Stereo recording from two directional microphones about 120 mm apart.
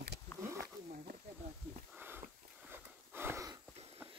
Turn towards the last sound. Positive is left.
turn(degrees=-20)  # may be behind; listen again after turning